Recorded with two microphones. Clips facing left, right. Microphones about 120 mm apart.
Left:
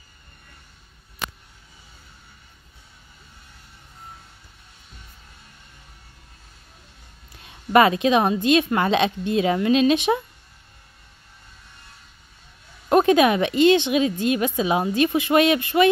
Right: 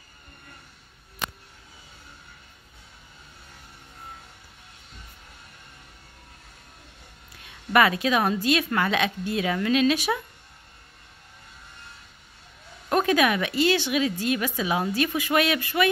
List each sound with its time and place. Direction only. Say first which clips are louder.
7.4 s a woman's voice: left 4 dB; 25° left (ahead or behind)
12.9 s a woman's voice: left 5 dB; 25° left (ahead or behind)